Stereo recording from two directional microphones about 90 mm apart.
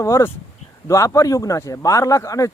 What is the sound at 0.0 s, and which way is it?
Speech, 35° left (ahead or behind).